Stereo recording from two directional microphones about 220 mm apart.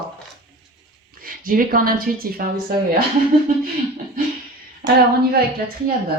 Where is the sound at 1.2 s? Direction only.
40° right (ahead or behind).